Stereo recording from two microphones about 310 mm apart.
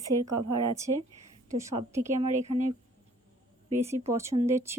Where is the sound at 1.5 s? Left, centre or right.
Centre.